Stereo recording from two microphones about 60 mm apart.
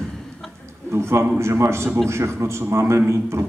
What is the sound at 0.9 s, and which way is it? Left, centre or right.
A man's voice, right.